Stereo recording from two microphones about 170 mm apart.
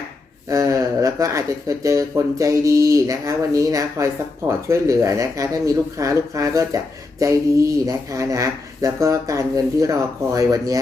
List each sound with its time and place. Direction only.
0.5 s speech: 20° right (ahead or behind)